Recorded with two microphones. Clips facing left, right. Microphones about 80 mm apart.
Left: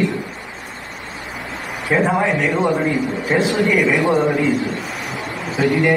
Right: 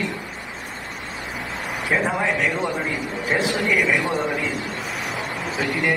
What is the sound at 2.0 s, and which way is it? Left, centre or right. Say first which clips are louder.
A man's voice: left 4 dB; left.